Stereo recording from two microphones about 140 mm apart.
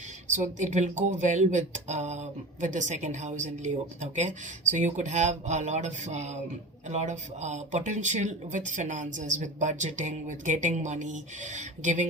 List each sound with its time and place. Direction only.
0.3 s speech: 55° right (ahead or behind)